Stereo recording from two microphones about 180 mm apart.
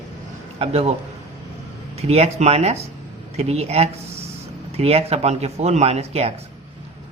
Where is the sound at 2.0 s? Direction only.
35° right (ahead or behind).